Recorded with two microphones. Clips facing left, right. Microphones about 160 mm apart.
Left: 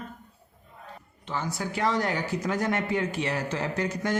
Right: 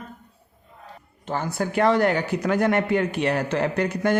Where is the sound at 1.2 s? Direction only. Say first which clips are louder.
Right 5 dB; 50° right (ahead or behind).